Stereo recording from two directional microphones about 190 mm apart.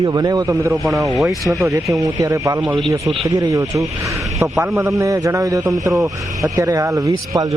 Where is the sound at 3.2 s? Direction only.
15° right (ahead or behind).